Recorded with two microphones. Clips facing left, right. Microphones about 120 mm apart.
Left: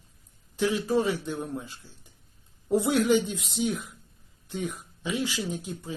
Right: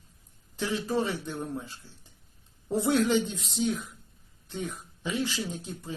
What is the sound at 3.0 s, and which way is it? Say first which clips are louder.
Speech: left 2 dB; 5° left (ahead or behind).